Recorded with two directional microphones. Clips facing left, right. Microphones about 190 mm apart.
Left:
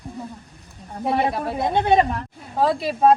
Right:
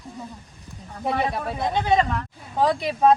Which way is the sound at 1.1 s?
25° left (ahead or behind).